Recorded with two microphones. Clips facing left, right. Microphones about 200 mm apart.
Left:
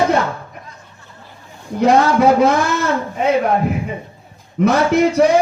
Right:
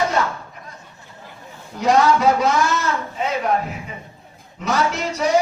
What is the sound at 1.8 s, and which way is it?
Speech, 55° left (ahead or behind).